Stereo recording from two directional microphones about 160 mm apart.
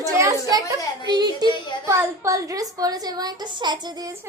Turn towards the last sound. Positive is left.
turn(degrees=-25)  # may be behind; listen again after turning